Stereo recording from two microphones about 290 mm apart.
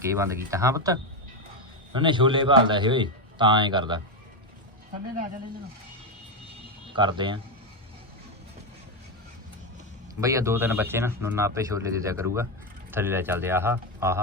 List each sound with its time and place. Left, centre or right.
0.0 s speech: centre
6.9 s speech: centre
10.2 s speech: centre